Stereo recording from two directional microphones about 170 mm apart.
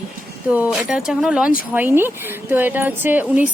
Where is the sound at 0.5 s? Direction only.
5° right (ahead or behind).